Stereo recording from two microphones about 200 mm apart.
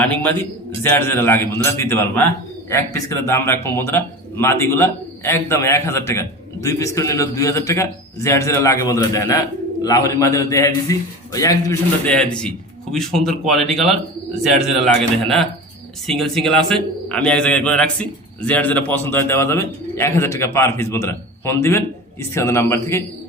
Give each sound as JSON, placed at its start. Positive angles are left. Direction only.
{"t": 0.0, "sound": "speech", "side_deg": 10}
{"t": 12.0, "sound": "a man's voice", "side_deg": 5}
{"t": 16.0, "sound": "a man's voice", "side_deg": 0}